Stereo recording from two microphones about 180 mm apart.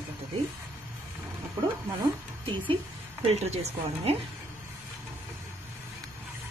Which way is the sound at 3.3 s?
35° right (ahead or behind).